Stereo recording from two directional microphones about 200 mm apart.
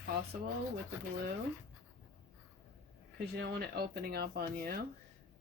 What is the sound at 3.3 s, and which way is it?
A woman's voice, 50° right (ahead or behind).